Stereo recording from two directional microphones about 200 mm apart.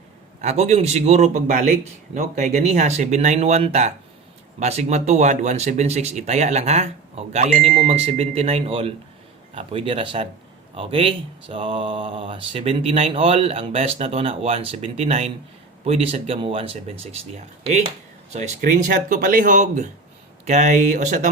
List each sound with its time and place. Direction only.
0.4 s speech: 35° right (ahead or behind)